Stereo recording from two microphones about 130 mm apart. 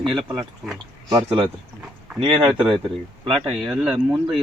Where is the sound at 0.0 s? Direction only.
40° right (ahead or behind).